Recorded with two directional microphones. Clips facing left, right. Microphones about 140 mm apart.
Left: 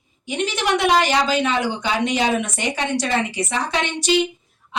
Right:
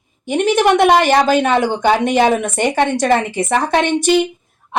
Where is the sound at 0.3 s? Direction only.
50° right (ahead or behind).